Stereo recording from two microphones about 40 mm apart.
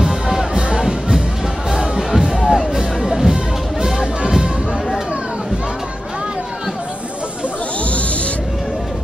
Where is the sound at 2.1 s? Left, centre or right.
Centre.